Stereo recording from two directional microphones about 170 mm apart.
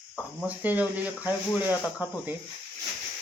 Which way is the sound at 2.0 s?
10° right (ahead or behind).